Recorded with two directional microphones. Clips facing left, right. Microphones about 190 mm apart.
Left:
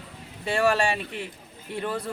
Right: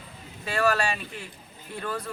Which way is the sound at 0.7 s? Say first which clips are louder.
Left 2 dB; 30° left (ahead or behind).